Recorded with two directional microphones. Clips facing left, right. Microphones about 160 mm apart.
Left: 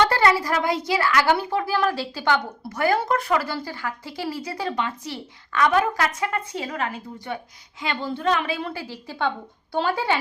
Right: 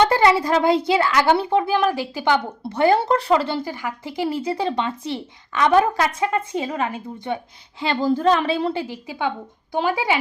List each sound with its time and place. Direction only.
0.0 s a sound: 20° right (ahead or behind)
0.9 s speech: 25° right (ahead or behind)
2.6 s speech: 25° right (ahead or behind)
7.8 s a woman's voice: 35° right (ahead or behind); by 10.2 s 15° right (ahead or behind)